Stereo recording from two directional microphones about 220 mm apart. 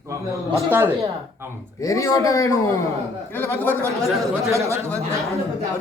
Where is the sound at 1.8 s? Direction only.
15° left (ahead or behind).